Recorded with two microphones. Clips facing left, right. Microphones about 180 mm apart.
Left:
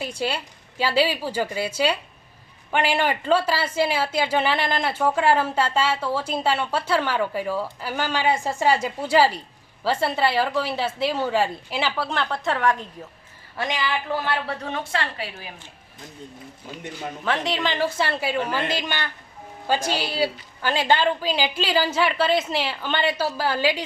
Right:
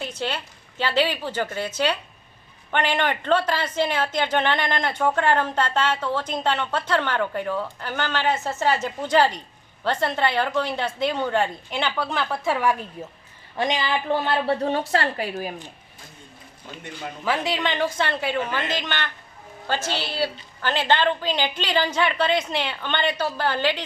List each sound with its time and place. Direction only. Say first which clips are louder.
0.0 s a woman's voice: left 2 dB; 10° left (ahead or behind); by 12.7 s 5° right (ahead or behind)
13.6 s a woman's voice: right 2 dB; 25° right (ahead or behind); by 15.5 s 45° right (ahead or behind)
17.2 s a woman's voice: even; 5° right (ahead or behind)